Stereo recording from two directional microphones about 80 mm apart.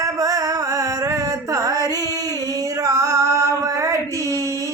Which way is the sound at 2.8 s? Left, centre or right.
Right.